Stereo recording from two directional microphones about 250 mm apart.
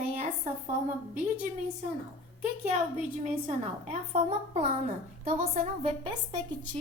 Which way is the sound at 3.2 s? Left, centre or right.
Right.